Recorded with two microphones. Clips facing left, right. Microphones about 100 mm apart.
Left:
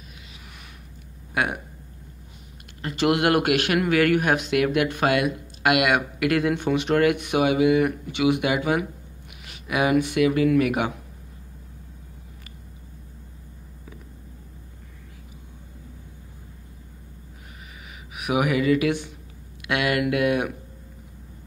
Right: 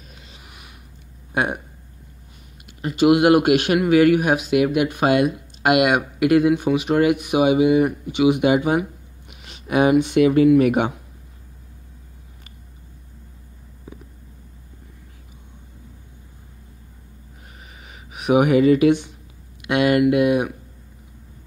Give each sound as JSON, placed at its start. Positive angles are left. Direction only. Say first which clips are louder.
{"t": 1.3, "sound": "speech", "louder": "right 3 dB", "side_deg": -25}
{"t": 2.8, "sound": "a man's voice", "louder": "right 6 dB", "side_deg": -15}
{"t": 6.5, "sound": "a man's voice", "louder": "right 3 dB", "side_deg": -10}
{"t": 9.4, "sound": "a sound", "louder": "right 6 dB", "side_deg": -30}
{"t": 9.9, "sound": "a man's voice", "louder": "right 4 dB", "side_deg": -25}
{"t": 18.1, "sound": "a man's voice", "louder": "right 7 dB", "side_deg": -30}